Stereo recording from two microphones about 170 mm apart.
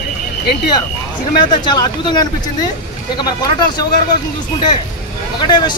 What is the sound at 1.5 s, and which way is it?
Speech, 25° left (ahead or behind).